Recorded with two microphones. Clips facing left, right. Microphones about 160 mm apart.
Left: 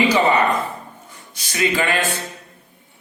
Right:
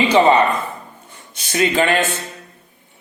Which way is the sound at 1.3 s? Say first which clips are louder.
Right 3 dB; 25° right (ahead or behind).